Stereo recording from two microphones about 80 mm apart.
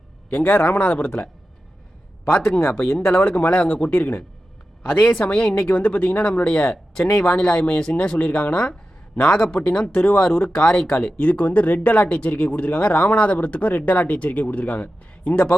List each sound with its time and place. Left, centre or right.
0.3 s speech: centre
2.2 s speech: left
3.1 s speech: centre